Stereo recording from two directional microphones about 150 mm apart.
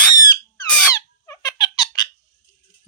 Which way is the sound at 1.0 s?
20° left (ahead or behind).